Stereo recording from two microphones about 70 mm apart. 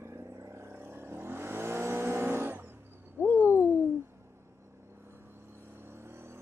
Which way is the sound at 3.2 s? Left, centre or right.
Left.